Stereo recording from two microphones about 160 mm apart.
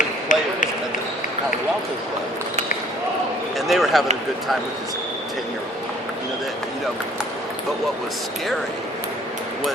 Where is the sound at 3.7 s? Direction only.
Centre (ahead or behind).